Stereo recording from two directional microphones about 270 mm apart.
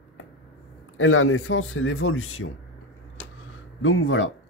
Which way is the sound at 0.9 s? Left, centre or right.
Left.